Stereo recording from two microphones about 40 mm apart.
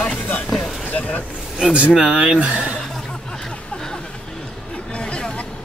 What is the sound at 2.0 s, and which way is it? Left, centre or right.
Speech, right.